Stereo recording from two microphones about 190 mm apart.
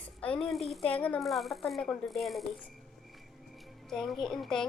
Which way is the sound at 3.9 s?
Centre (ahead or behind).